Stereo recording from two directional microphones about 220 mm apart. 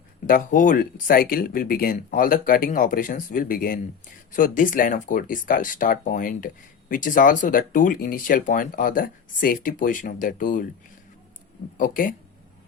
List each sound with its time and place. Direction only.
0.3 s speech: 40° left (ahead or behind)
11.8 s speech: 40° left (ahead or behind)